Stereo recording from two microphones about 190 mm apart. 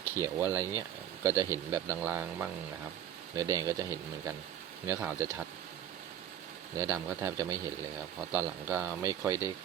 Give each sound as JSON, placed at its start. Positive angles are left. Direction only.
{"t": 0.2, "sound": "speech", "side_deg": -15}
{"t": 0.6, "sound": "speech", "side_deg": 15}
{"t": 1.2, "sound": "speech", "side_deg": -15}
{"t": 4.9, "sound": "speech", "side_deg": -10}
{"t": 6.7, "sound": "speech", "side_deg": -10}